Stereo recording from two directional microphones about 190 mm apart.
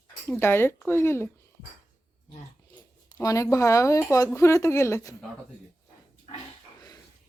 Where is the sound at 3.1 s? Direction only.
15° left (ahead or behind).